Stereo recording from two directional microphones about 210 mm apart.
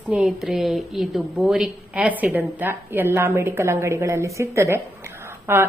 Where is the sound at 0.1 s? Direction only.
5° right (ahead or behind).